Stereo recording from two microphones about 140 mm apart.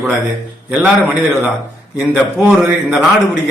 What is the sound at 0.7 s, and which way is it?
A man's voice, 10° right (ahead or behind).